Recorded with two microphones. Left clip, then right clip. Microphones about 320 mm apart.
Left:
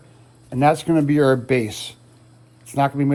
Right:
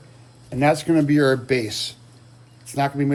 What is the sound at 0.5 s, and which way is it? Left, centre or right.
Speech, centre.